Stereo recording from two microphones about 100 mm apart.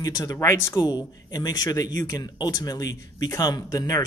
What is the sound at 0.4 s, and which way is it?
Speech, 30° left (ahead or behind).